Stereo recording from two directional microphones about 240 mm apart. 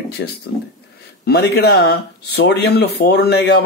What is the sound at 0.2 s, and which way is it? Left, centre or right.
A man's voice, left.